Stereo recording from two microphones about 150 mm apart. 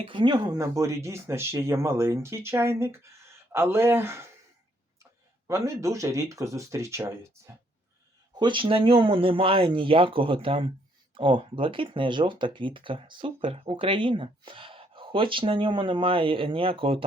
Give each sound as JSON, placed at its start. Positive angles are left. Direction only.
{"t": 0.0, "sound": "speech", "side_deg": -30}
{"t": 5.5, "sound": "speech", "side_deg": -20}
{"t": 8.4, "sound": "speech", "side_deg": -35}